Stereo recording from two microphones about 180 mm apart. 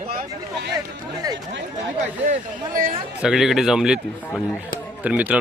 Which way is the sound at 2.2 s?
50° right (ahead or behind).